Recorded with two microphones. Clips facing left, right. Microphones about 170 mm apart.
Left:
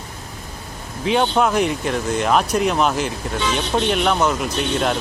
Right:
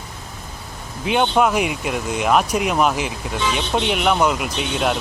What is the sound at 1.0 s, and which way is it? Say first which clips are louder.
Speech: even; 5° right (ahead or behind).